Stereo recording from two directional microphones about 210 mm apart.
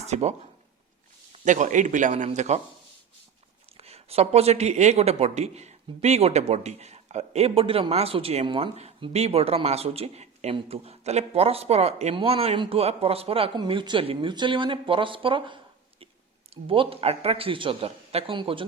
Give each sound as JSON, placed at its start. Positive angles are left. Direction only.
{"t": 0.0, "sound": "speech", "side_deg": -30}
{"t": 1.5, "sound": "speech", "side_deg": -35}
{"t": 3.8, "sound": "speech", "side_deg": -30}